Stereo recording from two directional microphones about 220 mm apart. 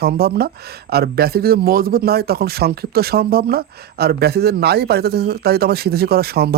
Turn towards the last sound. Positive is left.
turn(degrees=-45)  # may be behind; listen again after turning